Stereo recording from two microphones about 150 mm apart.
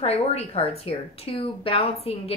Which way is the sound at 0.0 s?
45° left (ahead or behind).